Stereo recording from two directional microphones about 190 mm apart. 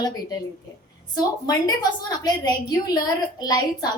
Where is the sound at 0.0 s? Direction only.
20° left (ahead or behind).